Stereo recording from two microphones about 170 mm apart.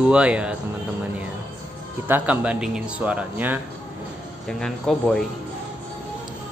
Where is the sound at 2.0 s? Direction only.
10° right (ahead or behind).